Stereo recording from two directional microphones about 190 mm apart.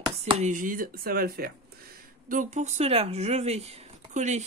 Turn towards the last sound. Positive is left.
turn(degrees=-40)  # may be behind; listen again after turning